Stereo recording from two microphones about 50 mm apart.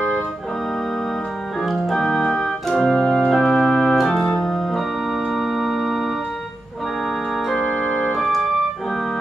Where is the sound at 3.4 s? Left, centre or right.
Centre.